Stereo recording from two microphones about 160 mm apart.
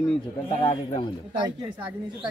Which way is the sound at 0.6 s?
35° left (ahead or behind).